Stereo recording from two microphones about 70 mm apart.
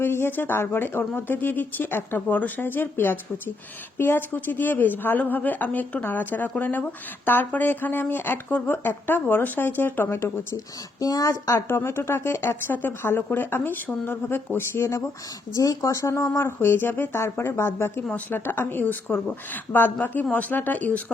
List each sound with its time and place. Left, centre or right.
0.0 s a woman's voice: left
11.0 s a woman's voice: left
11.7 s speech: left
15.5 s a woman's voice: left